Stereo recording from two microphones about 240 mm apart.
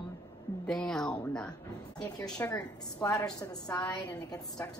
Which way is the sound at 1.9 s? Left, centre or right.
Centre.